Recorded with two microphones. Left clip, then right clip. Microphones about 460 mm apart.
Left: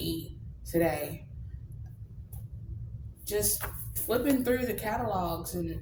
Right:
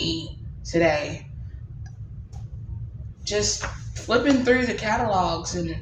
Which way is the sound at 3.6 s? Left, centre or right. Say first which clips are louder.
Right 8 dB; left.